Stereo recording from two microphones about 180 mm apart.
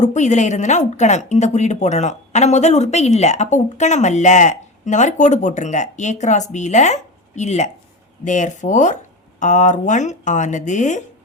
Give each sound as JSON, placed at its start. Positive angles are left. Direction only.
{"t": 0.0, "sound": "a woman's voice", "side_deg": 40}